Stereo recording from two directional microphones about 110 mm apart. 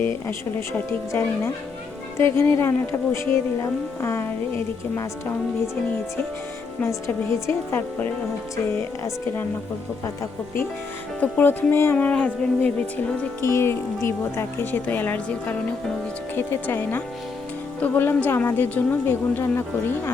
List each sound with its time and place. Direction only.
0.0 s a woman's voice: 20° left (ahead or behind)
7.4 s a woman's voice: 20° left (ahead or behind)
11.2 s speech: 15° left (ahead or behind)
13.4 s a woman's voice: 25° left (ahead or behind)